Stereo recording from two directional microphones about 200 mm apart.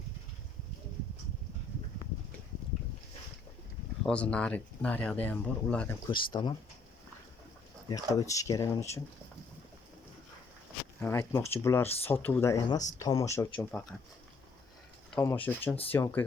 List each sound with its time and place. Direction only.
4.0 s speech: 5° left (ahead or behind)
6.1 s speech: 25° left (ahead or behind)
7.9 s speech: 20° left (ahead or behind)
11.0 s speech: 15° left (ahead or behind)
15.2 s speech: 10° left (ahead or behind)